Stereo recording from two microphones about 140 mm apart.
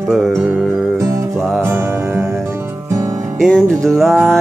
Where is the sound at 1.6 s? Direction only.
20° right (ahead or behind).